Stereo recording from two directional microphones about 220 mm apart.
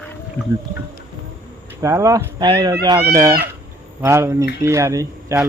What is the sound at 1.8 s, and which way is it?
Speech, 15° right (ahead or behind).